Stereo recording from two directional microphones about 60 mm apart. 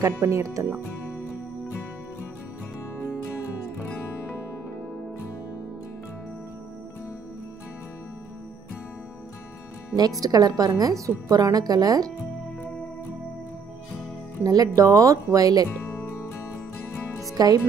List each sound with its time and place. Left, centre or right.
0.0 s speech: right
10.2 s a woman's voice: right
14.4 s speech: right
16.0 s music: left
17.4 s a woman's voice: right